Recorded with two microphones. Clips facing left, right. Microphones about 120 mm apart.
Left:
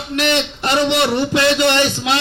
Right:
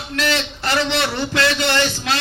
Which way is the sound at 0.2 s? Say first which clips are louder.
Left 4 dB; 20° left (ahead or behind).